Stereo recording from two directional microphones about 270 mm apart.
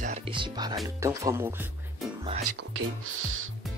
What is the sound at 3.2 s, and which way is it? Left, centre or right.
Speech, right.